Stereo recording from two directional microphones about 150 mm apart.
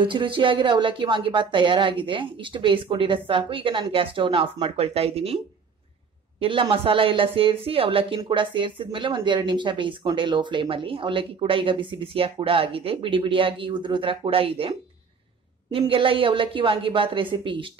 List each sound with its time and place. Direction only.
0.0 s a woman's voice: 35° right (ahead or behind)
6.4 s a woman's voice: 35° right (ahead or behind)
15.9 s a woman's voice: 35° right (ahead or behind)